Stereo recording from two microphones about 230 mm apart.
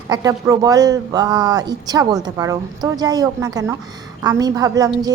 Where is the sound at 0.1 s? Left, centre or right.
Centre.